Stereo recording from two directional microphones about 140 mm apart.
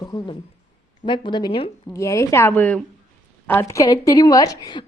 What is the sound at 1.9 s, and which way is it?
A woman's voice, 20° left (ahead or behind).